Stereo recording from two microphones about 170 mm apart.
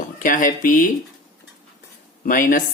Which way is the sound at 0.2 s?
50° left (ahead or behind).